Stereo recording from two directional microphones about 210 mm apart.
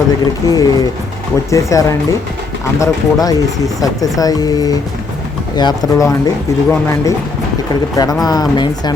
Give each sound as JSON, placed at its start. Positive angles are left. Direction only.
{"t": 0.4, "sound": "speech", "side_deg": 15}
{"t": 8.2, "sound": "speech", "side_deg": 20}